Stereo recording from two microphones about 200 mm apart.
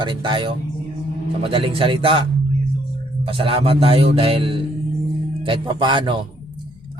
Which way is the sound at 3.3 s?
25° right (ahead or behind).